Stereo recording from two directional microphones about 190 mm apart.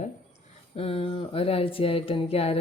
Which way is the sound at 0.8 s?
30° left (ahead or behind).